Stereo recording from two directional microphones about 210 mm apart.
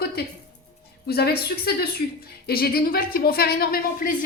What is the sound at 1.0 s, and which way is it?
A woman's voice, 50° left (ahead or behind).